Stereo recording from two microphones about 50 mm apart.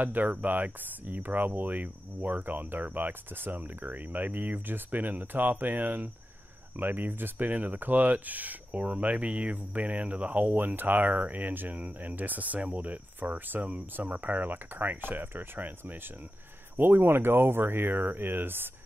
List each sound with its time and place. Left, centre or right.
0.0 s speech: right